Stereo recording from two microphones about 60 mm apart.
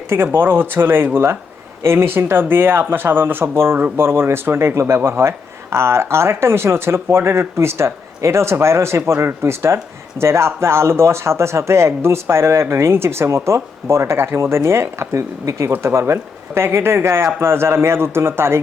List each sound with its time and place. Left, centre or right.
0.3 s speech: right